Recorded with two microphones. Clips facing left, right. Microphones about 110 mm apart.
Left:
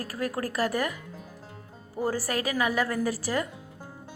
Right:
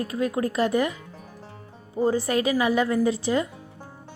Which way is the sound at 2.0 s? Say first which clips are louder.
Right 6 dB; 25° right (ahead or behind).